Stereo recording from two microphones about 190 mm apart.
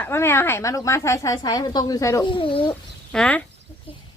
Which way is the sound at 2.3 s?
30° left (ahead or behind).